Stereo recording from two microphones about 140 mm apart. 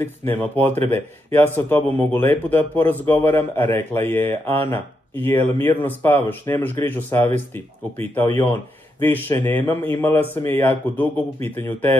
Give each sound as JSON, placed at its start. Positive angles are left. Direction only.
{"t": 0.0, "sound": "speech", "side_deg": 15}